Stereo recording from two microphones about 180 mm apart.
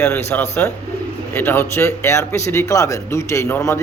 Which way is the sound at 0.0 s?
10° left (ahead or behind).